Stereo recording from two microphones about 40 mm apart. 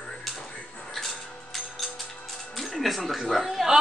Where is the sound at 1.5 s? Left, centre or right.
Centre.